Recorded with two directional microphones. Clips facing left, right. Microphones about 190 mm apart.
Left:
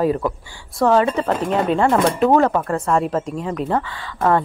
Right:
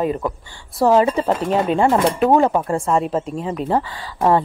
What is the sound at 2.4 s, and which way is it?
Speech, 10° right (ahead or behind).